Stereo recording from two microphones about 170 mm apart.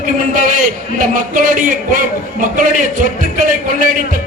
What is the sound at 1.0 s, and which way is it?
A man's voice, 50° right (ahead or behind).